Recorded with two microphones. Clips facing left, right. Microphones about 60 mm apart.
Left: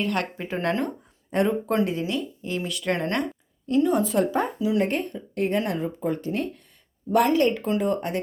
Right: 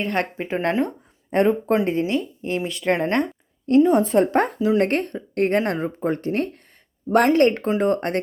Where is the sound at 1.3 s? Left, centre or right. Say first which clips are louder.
Right 5 dB; right.